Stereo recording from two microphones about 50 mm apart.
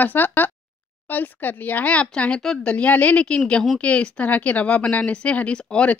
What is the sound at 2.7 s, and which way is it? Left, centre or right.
Speech, left.